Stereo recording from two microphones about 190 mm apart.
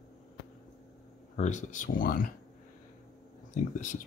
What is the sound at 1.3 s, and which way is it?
Speech, 40° left (ahead or behind).